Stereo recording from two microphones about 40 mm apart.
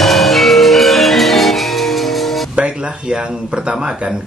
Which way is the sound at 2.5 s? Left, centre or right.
Right.